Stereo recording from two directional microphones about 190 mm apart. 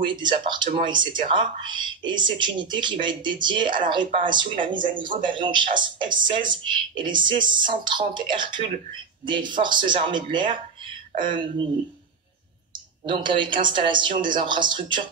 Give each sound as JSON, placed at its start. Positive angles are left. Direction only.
{"t": 0.0, "sound": "speech", "side_deg": -25}
{"t": 13.0, "sound": "speech", "side_deg": -25}